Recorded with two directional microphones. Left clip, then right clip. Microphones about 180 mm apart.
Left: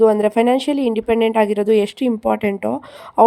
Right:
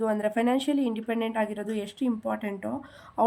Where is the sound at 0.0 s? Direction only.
35° left (ahead or behind).